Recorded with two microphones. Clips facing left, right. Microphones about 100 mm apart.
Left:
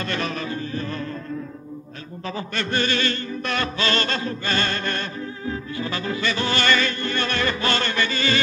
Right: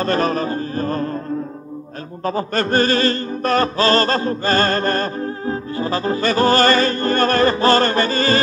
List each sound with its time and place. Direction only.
0.0 s music: 40° right (ahead or behind)
2.2 s music: 40° right (ahead or behind)